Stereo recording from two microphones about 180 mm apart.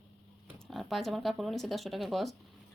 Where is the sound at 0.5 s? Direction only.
Centre (ahead or behind).